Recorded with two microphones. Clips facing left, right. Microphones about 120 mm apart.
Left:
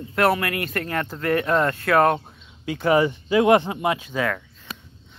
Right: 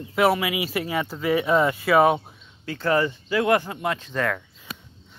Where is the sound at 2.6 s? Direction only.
15° left (ahead or behind).